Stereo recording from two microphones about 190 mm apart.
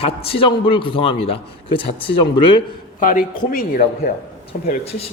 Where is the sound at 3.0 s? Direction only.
45° left (ahead or behind).